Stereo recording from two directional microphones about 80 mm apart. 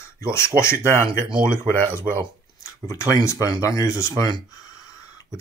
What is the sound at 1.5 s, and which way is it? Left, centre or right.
Speech, left.